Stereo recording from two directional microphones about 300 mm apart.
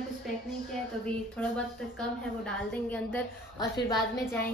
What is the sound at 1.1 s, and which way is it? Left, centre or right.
A woman's voice, centre.